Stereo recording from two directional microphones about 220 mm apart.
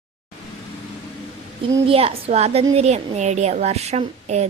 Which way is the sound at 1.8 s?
25° right (ahead or behind).